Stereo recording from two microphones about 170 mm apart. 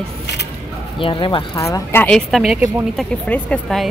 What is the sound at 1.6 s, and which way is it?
Speech, 15° left (ahead or behind).